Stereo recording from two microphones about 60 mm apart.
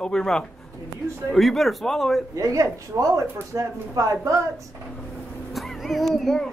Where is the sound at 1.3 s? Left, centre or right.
Centre.